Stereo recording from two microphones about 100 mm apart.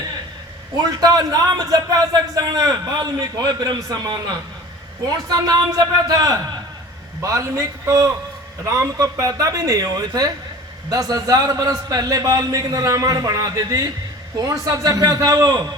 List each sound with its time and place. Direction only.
0.8 s a man's voice: 40° right (ahead or behind)